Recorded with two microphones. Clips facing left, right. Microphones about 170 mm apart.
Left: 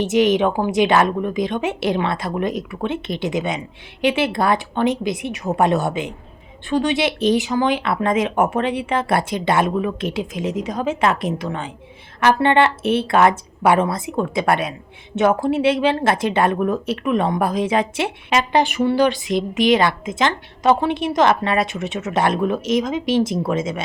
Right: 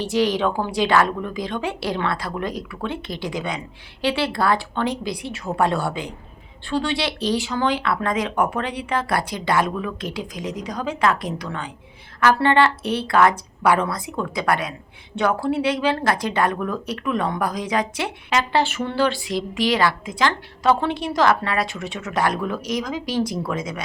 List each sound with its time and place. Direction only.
0.0 s a woman's voice: 20° left (ahead or behind)